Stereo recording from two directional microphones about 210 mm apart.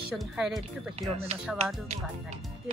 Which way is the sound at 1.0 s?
30° right (ahead or behind).